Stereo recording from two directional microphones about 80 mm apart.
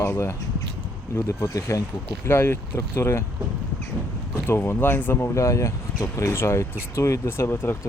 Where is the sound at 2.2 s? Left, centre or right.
Left.